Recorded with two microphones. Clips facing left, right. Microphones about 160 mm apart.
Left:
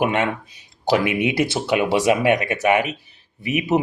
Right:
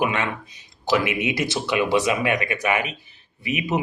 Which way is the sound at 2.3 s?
60° left (ahead or behind).